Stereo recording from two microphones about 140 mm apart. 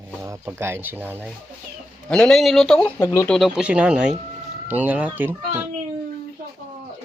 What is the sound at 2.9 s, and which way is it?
Speech, 20° left (ahead or behind).